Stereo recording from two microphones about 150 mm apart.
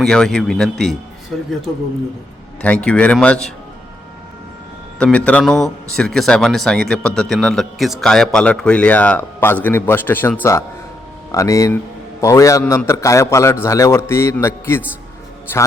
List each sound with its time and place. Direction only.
0.0 s a man's voice: 5° left (ahead or behind)
2.6 s a man's voice: 10° left (ahead or behind)
4.9 s a man's voice: 10° left (ahead or behind)